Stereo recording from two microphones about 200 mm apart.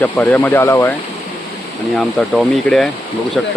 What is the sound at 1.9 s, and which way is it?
Speech, centre (ahead or behind).